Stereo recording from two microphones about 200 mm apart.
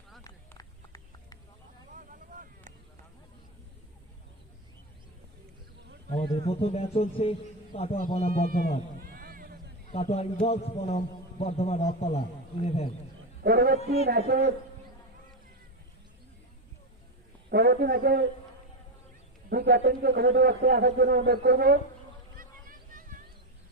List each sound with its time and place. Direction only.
0.3 s a sound: 20° left (ahead or behind)
2.0 s vehicle: 45° right (ahead or behind)
6.2 s speech: 30° left (ahead or behind)
9.0 s a sound: 45° right (ahead or behind)
9.9 s a man's voice: 30° left (ahead or behind)
13.4 s a man's voice: 50° right (ahead or behind)
13.7 s a man's voice: 30° left (ahead or behind)
14.1 s a man's voice: 50° right (ahead or behind)
17.5 s a man's voice: 50° right (ahead or behind)
19.5 s a man's voice: 50° right (ahead or behind)
22.4 s a sound: 45° right (ahead or behind)